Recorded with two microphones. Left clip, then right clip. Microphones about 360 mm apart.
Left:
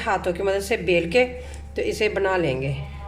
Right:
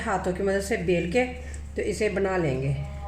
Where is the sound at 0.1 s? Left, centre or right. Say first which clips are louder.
Left 3 dB; left.